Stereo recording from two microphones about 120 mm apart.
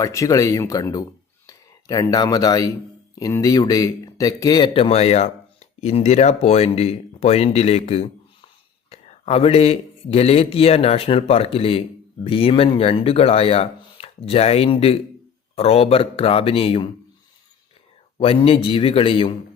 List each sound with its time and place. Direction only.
0.0 s speech: 25° left (ahead or behind)
4.7 s speech: 55° left (ahead or behind)
18.2 s speech: 50° left (ahead or behind)